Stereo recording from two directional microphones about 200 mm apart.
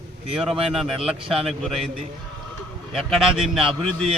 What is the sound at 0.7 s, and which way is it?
A man's voice, centre (ahead or behind).